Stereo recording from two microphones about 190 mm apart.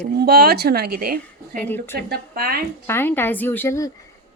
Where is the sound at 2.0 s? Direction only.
55° right (ahead or behind).